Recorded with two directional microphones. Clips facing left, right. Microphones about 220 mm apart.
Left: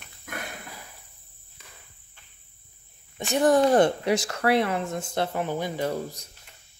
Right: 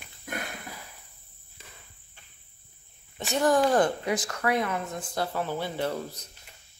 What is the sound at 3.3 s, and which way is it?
Speech, 20° left (ahead or behind).